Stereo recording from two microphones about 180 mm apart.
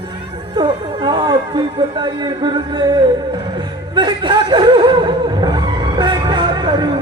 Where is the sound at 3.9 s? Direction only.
25° right (ahead or behind).